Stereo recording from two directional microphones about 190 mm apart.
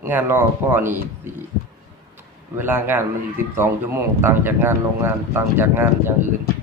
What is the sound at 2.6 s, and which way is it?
A man's voice, 10° right (ahead or behind).